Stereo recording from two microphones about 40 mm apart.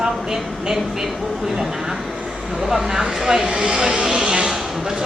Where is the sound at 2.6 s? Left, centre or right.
Centre.